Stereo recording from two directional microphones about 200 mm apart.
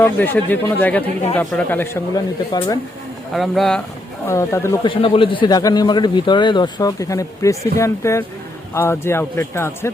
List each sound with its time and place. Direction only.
0.0 s speech: 10° left (ahead or behind)
3.3 s speech: centre (ahead or behind)
4.3 s a man's voice: 15° left (ahead or behind)